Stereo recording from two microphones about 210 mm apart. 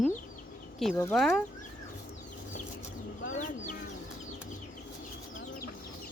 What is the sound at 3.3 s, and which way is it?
Chicken, 35° left (ahead or behind).